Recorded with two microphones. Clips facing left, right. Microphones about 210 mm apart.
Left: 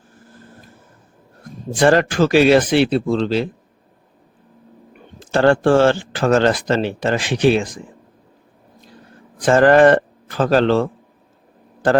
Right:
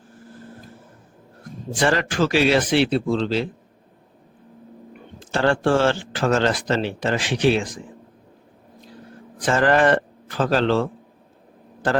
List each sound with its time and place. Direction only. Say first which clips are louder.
1.8 s speech: left 6 dB; 45° left (ahead or behind)
5.3 s speech: left 5 dB; 50° left (ahead or behind)
9.5 s a man's voice: left 7 dB; 50° left (ahead or behind)